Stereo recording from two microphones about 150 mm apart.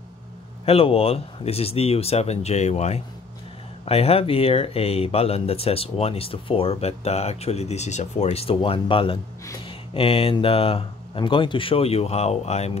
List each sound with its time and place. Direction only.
0.7 s speech: 40° left (ahead or behind)